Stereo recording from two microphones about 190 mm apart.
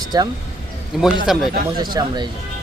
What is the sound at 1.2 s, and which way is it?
Speech, centre (ahead or behind).